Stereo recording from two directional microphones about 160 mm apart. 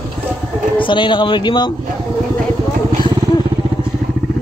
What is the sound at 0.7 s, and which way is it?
Speech, 30° left (ahead or behind).